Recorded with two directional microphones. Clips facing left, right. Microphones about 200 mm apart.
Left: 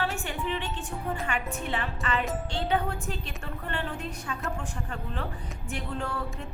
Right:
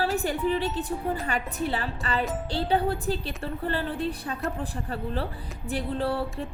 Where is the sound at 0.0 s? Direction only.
35° right (ahead or behind).